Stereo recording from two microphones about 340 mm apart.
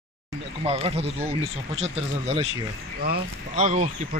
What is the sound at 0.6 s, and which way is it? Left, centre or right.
Speech, centre.